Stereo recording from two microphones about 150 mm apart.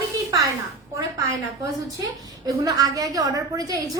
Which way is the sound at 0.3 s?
25° right (ahead or behind).